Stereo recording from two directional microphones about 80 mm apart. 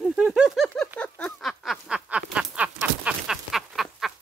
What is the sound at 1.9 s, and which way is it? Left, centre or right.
Duck, centre.